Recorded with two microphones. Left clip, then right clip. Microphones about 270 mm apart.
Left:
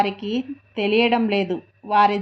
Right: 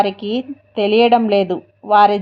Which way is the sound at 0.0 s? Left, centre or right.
Right.